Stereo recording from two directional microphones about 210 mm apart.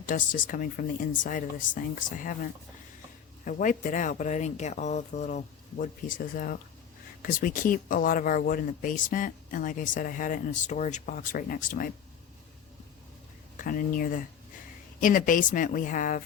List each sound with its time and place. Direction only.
0.0 s speech: 40° left (ahead or behind)
13.6 s speech: 40° left (ahead or behind)